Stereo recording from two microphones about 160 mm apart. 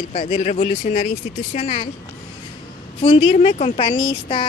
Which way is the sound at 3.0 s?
40° left (ahead or behind).